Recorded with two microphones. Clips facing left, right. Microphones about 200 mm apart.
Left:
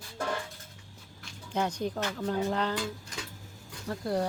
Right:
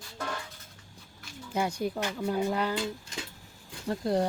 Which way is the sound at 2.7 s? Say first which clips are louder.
Right 2 dB; 25° right (ahead or behind).